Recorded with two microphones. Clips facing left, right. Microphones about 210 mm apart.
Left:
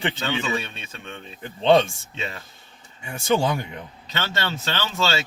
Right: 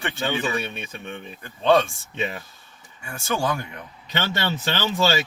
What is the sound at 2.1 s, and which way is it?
Speech, 15° right (ahead or behind).